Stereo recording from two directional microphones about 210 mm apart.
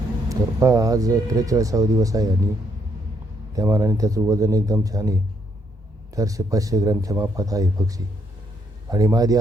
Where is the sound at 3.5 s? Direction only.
15° right (ahead or behind).